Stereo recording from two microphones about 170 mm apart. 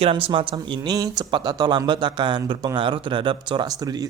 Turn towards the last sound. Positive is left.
turn(degrees=-20)  # may be behind; listen again after turning